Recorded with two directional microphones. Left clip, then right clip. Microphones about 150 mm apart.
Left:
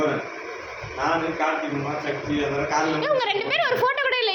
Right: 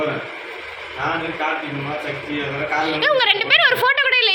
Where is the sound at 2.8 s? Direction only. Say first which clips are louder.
Right 8 dB; 5° left (ahead or behind); by 4.3 s 20° left (ahead or behind).